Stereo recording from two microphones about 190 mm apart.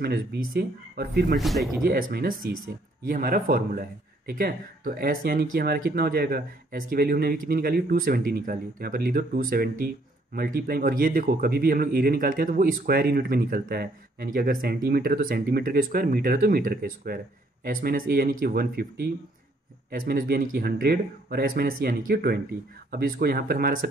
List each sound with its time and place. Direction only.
0.0 s speech: 50° right (ahead or behind)
1.3 s speech: centre (ahead or behind)
1.8 s speech: 45° right (ahead or behind)
20.1 s speech: 55° right (ahead or behind)